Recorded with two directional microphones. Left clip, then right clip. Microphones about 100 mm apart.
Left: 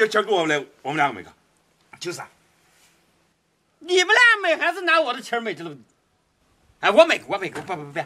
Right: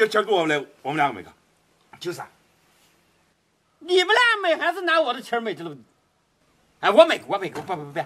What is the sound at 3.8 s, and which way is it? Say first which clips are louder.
Speech: left 2 dB; centre (ahead or behind).